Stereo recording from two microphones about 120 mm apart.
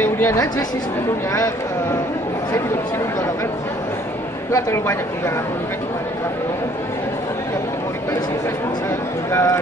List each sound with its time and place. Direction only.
0.0 s a sound: 20° left (ahead or behind)
1.3 s speech: 25° left (ahead or behind)
4.5 s speech: 25° left (ahead or behind)
9.3 s speech: 25° left (ahead or behind)